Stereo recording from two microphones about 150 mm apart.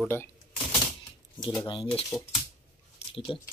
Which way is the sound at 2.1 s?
5° left (ahead or behind).